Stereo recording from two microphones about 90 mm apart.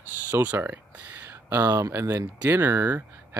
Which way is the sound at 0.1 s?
20° right (ahead or behind).